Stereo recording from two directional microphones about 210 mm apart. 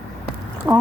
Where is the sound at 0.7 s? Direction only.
15° right (ahead or behind).